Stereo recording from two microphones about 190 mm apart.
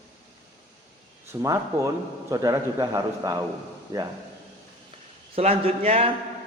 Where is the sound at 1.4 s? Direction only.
15° right (ahead or behind).